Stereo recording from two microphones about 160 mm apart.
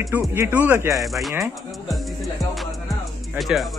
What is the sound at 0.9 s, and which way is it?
Speech, centre (ahead or behind).